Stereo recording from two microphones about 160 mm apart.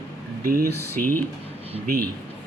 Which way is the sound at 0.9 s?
15° left (ahead or behind).